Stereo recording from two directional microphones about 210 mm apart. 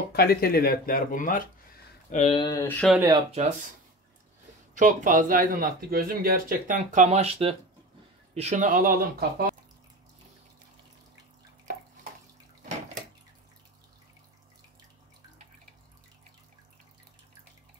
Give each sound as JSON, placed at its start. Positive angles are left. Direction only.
{"t": 0.1, "sound": "speech", "side_deg": 45}
{"t": 2.4, "sound": "speech", "side_deg": 15}
{"t": 2.9, "sound": "speech", "side_deg": -10}
{"t": 3.3, "sound": "speech", "side_deg": -30}
{"t": 4.7, "sound": "speech", "side_deg": -40}